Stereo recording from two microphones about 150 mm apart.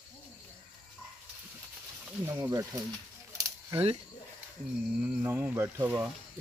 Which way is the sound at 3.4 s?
20° right (ahead or behind).